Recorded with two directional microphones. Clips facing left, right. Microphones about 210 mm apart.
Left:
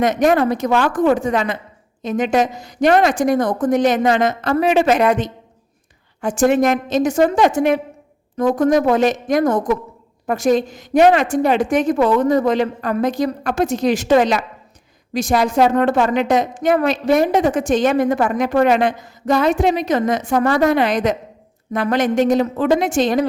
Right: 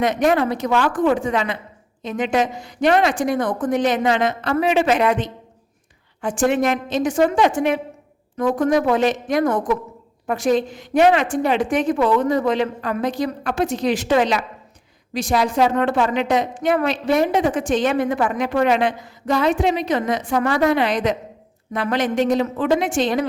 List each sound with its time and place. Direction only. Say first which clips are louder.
0.0 s a woman's voice: left 3 dB; 45° left (ahead or behind)